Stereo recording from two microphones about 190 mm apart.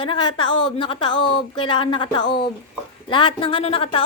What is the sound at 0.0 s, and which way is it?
A woman's voice, 25° left (ahead or behind).